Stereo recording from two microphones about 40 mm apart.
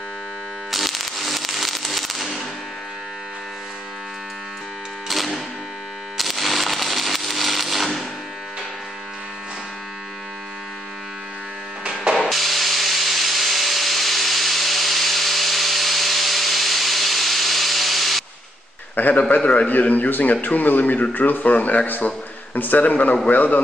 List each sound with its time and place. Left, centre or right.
0.7 s firecracker: centre
5.0 s music: centre
6.1 s a sound: centre
12.3 s tools: centre
18.9 s a sound: left
20.4 s speech: left